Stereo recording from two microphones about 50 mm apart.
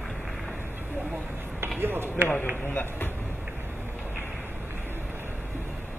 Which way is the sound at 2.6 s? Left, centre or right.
Left.